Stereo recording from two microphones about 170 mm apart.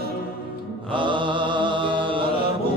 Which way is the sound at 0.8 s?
30° right (ahead or behind).